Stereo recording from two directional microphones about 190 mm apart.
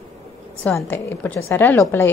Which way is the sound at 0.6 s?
5° left (ahead or behind).